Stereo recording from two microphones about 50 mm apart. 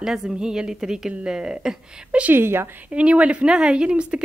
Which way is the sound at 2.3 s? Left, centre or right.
Right.